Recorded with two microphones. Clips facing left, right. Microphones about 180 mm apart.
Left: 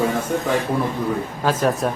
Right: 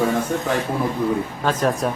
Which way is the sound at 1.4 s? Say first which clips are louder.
Left 2 dB; 5° left (ahead or behind).